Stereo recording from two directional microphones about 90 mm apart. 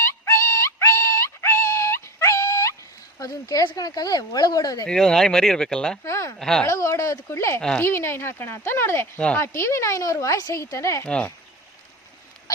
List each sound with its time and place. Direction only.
0.0 s synthetic singing: 30° left (ahead or behind)
3.2 s speech: 40° left (ahead or behind)
4.9 s speech: 5° left (ahead or behind)
6.1 s speech: 35° left (ahead or behind)
6.4 s speech: 5° left (ahead or behind)
6.7 s speech: 35° left (ahead or behind)
9.1 s speech: 15° left (ahead or behind)
9.4 s speech: 30° left (ahead or behind)
11.0 s speech: 15° left (ahead or behind)